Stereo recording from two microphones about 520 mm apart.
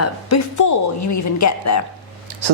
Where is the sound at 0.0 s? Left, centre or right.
Left.